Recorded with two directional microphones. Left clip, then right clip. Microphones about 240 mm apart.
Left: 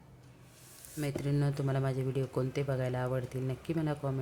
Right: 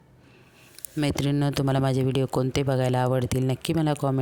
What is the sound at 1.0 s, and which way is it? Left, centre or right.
Speech, right.